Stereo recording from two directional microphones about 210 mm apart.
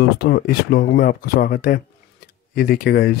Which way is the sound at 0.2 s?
50° left (ahead or behind).